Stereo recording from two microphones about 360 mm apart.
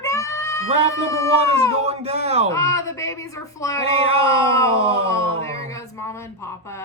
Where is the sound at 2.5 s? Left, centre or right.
Centre.